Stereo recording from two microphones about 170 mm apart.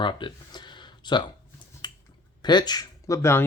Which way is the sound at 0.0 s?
30° left (ahead or behind).